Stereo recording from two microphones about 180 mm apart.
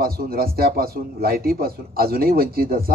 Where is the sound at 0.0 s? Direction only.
55° right (ahead or behind).